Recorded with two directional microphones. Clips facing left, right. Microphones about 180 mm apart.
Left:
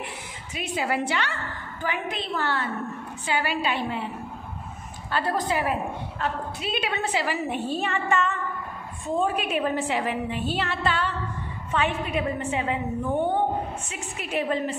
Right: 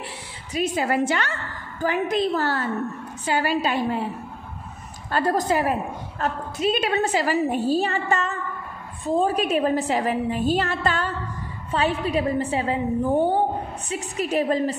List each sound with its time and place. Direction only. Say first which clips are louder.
0.6 s a woman's voice: right 5 dB; 45° right (ahead or behind)
5.1 s a woman's voice: right 4 dB; 45° right (ahead or behind)